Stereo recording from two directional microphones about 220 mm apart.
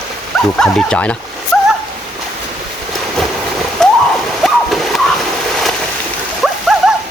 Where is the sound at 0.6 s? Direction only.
Centre (ahead or behind).